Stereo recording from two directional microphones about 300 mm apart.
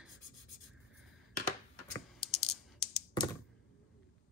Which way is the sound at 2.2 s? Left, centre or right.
Left.